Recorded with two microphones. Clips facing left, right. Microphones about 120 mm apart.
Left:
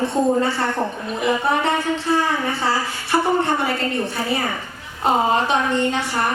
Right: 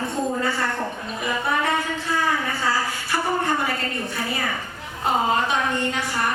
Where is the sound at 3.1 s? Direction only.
25° left (ahead or behind).